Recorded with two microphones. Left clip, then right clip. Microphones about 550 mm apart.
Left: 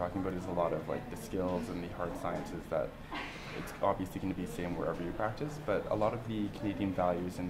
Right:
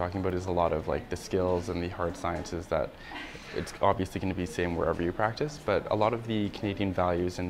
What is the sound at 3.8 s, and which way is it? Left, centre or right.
Speech, right.